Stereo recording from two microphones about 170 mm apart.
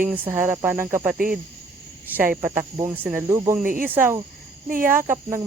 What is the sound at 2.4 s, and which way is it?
Speech, 15° right (ahead or behind).